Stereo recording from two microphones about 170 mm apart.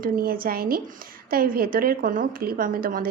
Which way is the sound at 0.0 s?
60° right (ahead or behind).